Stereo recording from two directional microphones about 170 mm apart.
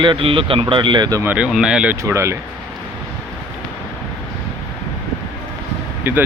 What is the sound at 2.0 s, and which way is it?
Speech, 15° right (ahead or behind).